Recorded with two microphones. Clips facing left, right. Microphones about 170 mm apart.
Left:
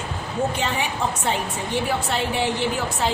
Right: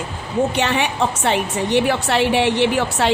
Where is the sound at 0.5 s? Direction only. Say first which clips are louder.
Right 6 dB; 75° right (ahead or behind).